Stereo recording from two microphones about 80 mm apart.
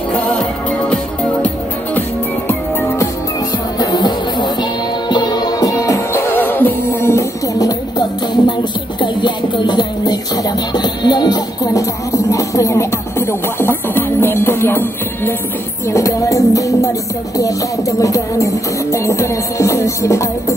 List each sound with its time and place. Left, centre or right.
3.8 s music: left
6.2 s music: left
9.0 s music: left
13.3 s music: left
15.9 s music: left